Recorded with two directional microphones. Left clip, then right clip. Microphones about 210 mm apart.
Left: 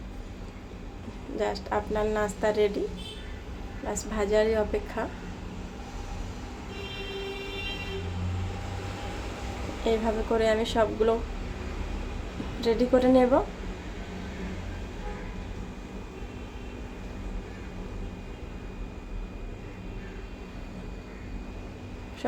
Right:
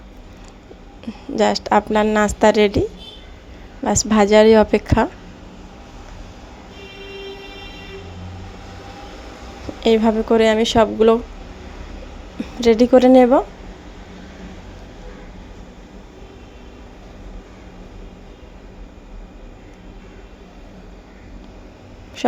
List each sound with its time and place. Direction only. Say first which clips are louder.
1.4 s a woman's voice: right 13 dB; 45° right (ahead or behind)
4.1 s a woman's voice: right 14 dB; 40° right (ahead or behind)
9.8 s a woman's voice: right 11 dB; 40° right (ahead or behind)
12.5 s a woman's voice: right 11 dB; 35° right (ahead or behind)
22.2 s a sound: right 12 dB; 40° right (ahead or behind)